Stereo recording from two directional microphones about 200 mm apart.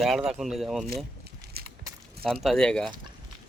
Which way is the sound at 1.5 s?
50° right (ahead or behind).